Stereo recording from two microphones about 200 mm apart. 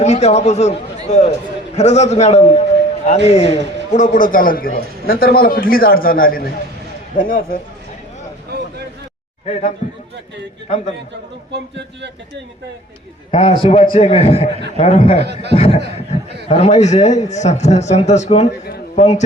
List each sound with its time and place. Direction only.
0.0 s a man's voice: 35° left (ahead or behind)
9.5 s speech: 30° left (ahead or behind)
11.5 s speech: 60° right (ahead or behind)
13.3 s a man's voice: 30° left (ahead or behind)